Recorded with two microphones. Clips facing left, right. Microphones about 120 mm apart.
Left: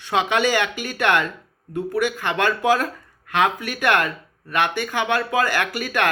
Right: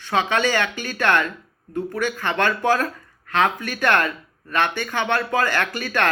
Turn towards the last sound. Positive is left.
turn(degrees=10)  # may be behind; listen again after turning